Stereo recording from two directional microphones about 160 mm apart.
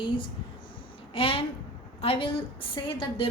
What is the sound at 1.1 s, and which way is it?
A woman's voice, 35° left (ahead or behind).